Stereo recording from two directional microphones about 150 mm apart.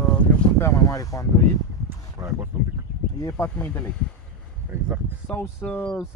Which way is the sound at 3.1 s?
20° left (ahead or behind).